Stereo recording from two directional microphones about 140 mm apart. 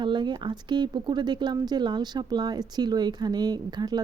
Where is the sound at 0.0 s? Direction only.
35° right (ahead or behind).